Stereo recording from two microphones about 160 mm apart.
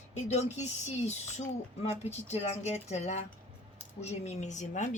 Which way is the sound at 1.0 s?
45° left (ahead or behind).